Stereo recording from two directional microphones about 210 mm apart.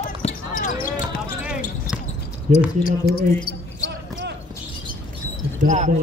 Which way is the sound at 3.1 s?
45° left (ahead or behind).